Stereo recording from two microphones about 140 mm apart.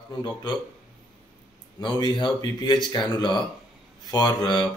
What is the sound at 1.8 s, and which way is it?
A man's voice, 30° left (ahead or behind).